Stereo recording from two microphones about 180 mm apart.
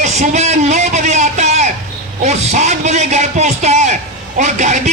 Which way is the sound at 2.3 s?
40° right (ahead or behind).